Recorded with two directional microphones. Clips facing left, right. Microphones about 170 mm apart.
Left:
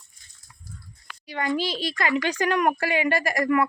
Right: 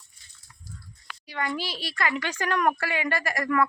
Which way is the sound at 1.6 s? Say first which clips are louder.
Left 4 dB; 20° left (ahead or behind).